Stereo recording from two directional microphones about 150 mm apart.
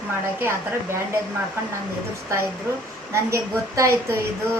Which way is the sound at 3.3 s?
20° right (ahead or behind).